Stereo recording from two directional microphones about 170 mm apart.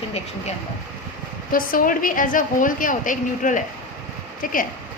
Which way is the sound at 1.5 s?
55° left (ahead or behind).